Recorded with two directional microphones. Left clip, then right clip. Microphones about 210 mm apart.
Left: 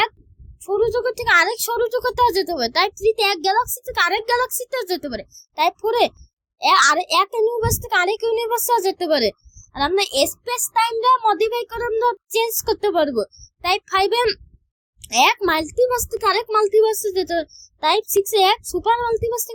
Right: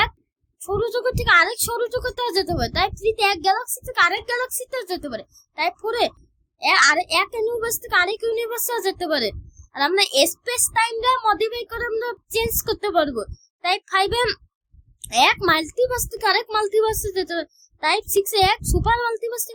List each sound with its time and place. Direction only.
0.6 s a woman's voice: 5° left (ahead or behind)